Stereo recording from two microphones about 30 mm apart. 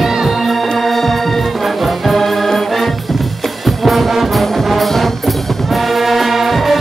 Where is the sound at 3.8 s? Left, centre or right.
Centre.